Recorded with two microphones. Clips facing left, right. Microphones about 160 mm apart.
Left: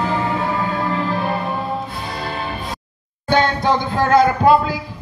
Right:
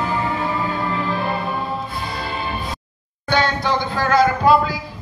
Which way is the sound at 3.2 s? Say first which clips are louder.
Left 3 dB; 50° left (ahead or behind).